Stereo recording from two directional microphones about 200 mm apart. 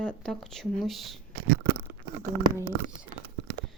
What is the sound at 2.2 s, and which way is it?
Speech, 15° right (ahead or behind).